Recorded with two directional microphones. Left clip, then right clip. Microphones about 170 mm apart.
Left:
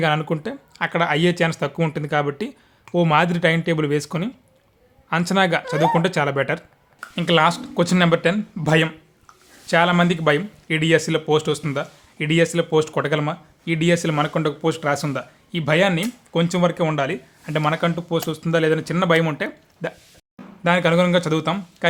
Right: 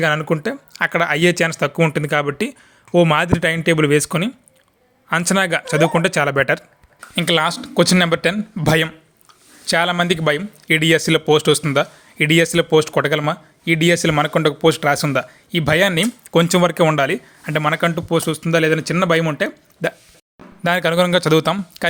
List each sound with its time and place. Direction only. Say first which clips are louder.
0.0 s speech: right 3 dB; 15° right (ahead or behind)
20.7 s speech: right 1 dB; 35° right (ahead or behind)